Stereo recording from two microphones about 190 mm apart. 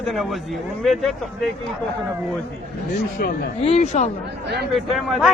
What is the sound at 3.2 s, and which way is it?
Speech, 55° left (ahead or behind).